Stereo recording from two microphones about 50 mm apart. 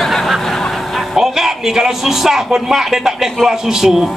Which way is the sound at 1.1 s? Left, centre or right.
Centre.